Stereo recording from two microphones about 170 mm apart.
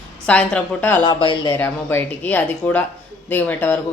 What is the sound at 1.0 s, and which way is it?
Speech, 30° left (ahead or behind).